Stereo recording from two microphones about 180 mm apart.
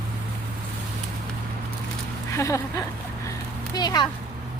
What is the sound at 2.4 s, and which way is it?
Speech, 15° left (ahead or behind).